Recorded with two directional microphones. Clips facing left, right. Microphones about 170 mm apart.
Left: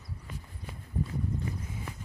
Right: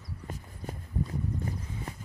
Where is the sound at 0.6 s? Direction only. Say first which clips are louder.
Right 8 dB; 45° right (ahead or behind).